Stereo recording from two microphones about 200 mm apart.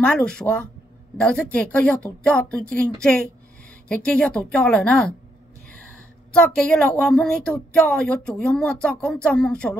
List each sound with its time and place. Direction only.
0.0 s speech: 5° left (ahead or behind)
6.3 s speech: 5° left (ahead or behind)